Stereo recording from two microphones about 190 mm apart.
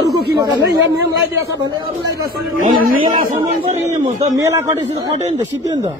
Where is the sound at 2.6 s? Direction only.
45° right (ahead or behind).